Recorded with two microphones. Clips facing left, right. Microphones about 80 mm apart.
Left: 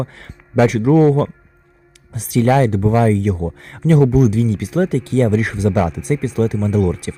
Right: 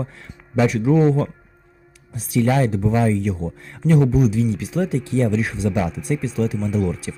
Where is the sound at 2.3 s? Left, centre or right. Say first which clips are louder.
Left 4 dB; left.